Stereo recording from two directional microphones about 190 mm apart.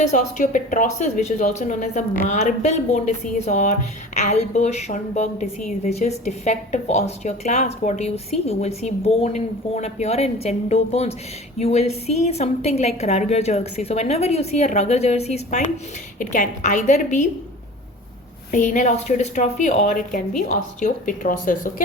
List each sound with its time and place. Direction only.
0.0 s a woman's voice: 40° left (ahead or behind)
18.5 s a woman's voice: 40° left (ahead or behind)